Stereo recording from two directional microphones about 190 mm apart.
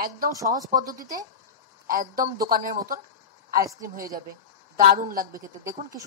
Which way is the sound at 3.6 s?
15° right (ahead or behind).